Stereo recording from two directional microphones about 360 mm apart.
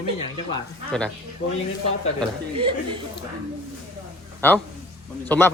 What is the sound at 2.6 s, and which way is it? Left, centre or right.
Speech, centre.